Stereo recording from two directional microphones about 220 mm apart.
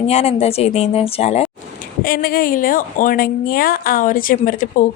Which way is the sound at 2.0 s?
40° left (ahead or behind).